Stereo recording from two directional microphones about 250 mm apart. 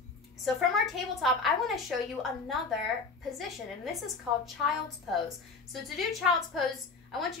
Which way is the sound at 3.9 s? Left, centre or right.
Centre.